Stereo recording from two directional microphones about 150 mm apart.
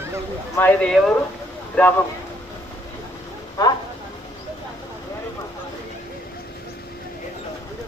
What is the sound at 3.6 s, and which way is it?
Speech, 25° left (ahead or behind).